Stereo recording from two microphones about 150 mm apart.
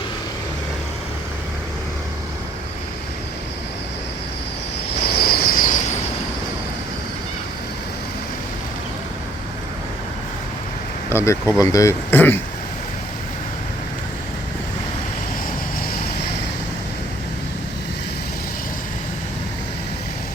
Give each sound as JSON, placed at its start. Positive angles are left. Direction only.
{"t": 5.0, "sound": "cricket", "side_deg": 90}
{"t": 11.1, "sound": "speech", "side_deg": 15}